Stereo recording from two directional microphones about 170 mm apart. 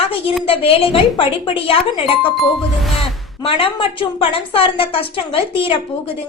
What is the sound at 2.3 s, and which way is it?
Music, centre (ahead or behind).